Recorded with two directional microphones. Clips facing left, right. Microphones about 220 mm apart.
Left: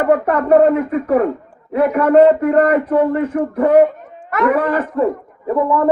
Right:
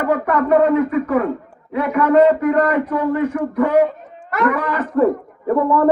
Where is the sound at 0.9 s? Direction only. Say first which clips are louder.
Left 2 dB; 45° left (ahead or behind).